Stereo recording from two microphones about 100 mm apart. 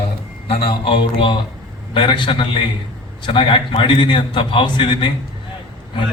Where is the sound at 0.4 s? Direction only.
60° left (ahead or behind).